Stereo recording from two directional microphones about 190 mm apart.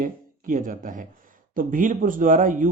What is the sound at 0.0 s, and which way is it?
Speech, 45° right (ahead or behind).